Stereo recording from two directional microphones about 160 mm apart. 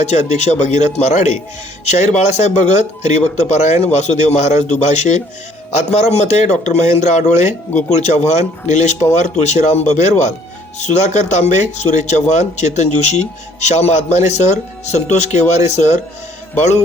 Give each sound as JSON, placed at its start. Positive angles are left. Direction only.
{"t": 0.0, "sound": "a man's voice", "side_deg": 45}